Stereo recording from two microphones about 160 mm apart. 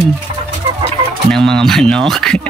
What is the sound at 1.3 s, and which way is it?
Speech, 5° left (ahead or behind).